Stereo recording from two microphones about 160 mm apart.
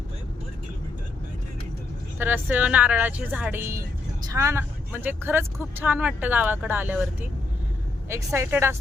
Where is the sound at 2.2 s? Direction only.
10° right (ahead or behind).